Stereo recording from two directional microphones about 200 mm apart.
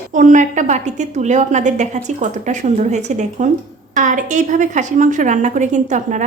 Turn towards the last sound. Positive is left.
turn(degrees=-40)  # may be behind; listen again after turning